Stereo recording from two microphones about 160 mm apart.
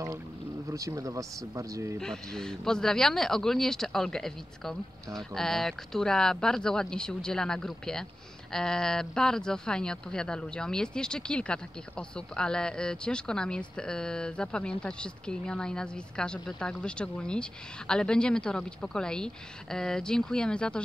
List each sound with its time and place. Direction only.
0.7 s speech: 20° right (ahead or behind)
2.0 s speech: 5° left (ahead or behind)